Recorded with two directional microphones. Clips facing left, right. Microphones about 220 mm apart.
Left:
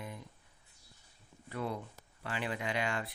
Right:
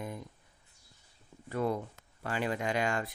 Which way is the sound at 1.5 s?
45° right (ahead or behind).